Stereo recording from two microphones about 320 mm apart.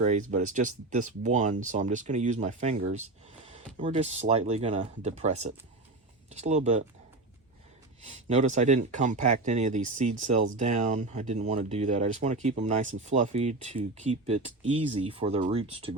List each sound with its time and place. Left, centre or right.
0.0 s speech: right
8.3 s speech: right